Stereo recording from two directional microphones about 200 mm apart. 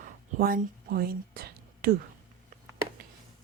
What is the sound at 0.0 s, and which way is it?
Whispering, 45° right (ahead or behind).